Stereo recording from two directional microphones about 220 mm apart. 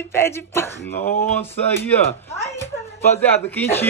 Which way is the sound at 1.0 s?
35° left (ahead or behind).